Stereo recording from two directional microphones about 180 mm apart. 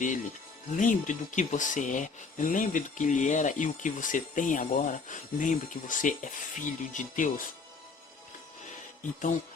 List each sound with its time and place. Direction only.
0.7 s speech: 45° left (ahead or behind)